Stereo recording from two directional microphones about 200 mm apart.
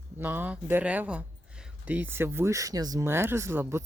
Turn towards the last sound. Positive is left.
turn(degrees=-10)  # may be behind; listen again after turning